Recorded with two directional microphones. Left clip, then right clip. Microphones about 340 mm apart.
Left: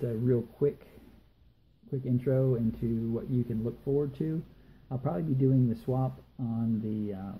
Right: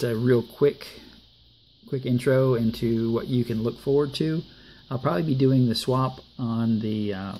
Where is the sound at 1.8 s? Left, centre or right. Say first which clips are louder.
Right 8 dB; centre.